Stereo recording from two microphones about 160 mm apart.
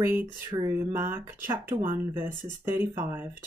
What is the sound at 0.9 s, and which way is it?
Speech, 15° right (ahead or behind).